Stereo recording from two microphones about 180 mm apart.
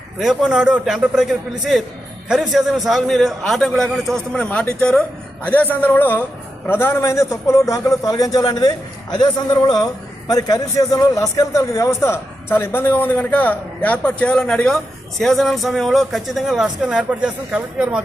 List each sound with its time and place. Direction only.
0.2 s a man's voice: centre (ahead or behind)